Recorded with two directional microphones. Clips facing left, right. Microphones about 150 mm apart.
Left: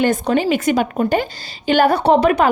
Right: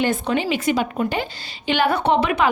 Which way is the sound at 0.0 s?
45° left (ahead or behind).